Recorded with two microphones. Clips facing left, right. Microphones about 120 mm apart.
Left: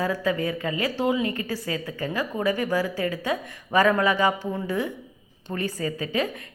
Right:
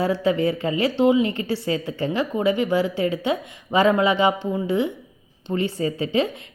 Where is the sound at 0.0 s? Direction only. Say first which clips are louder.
Right 5 dB; 30° right (ahead or behind).